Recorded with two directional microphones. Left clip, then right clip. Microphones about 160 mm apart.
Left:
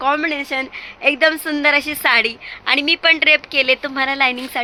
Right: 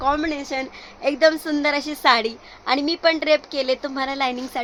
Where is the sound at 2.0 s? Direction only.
15° right (ahead or behind).